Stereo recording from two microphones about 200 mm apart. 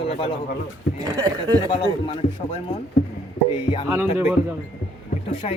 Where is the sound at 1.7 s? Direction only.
25° left (ahead or behind).